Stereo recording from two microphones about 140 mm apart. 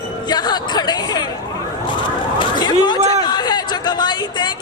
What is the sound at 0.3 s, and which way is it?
Chatter, 30° left (ahead or behind).